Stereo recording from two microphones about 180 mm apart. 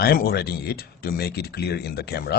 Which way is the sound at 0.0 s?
60° left (ahead or behind).